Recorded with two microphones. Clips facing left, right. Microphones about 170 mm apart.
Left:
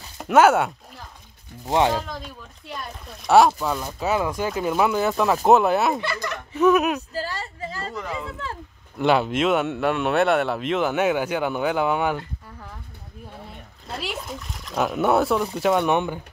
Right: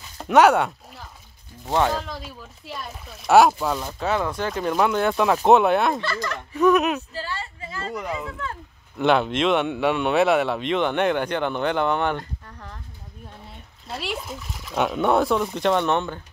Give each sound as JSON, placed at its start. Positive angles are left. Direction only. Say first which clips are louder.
{"t": 0.2, "sound": "a sound", "louder": "even", "side_deg": 0}
{"t": 1.7, "sound": "speech", "louder": "left 1 dB", "side_deg": 15}
{"t": 2.0, "sound": "speech", "louder": "left 1 dB", "side_deg": -5}
{"t": 7.2, "sound": "a woman's voice", "louder": "left 3 dB", "side_deg": 40}
{"t": 8.9, "sound": "speech", "louder": "even", "side_deg": 5}
{"t": 13.8, "sound": "speech", "louder": "right 1 dB", "side_deg": 0}